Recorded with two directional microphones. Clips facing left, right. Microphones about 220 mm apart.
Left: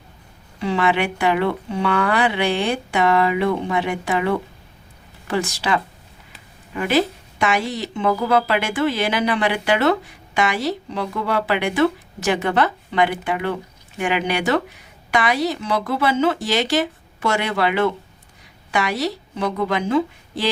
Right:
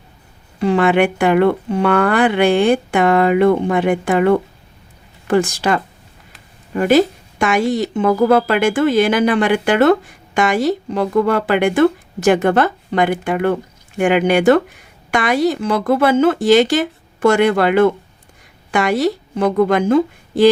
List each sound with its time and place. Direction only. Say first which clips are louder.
0.6 s a woman's voice: right 6 dB; 50° right (ahead or behind)